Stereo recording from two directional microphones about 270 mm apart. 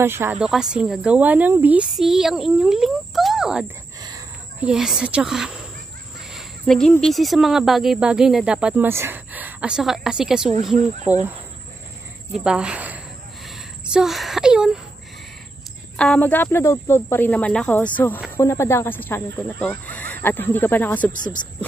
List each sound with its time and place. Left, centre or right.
0.0 s speech: centre
12.4 s speech: centre
13.8 s a sound: centre
16.0 s speech: centre
21.1 s speech: left